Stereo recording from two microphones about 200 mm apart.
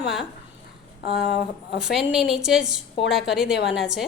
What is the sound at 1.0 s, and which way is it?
Speech, 55° left (ahead or behind).